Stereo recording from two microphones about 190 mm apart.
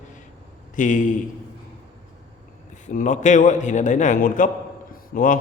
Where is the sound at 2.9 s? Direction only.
40° left (ahead or behind).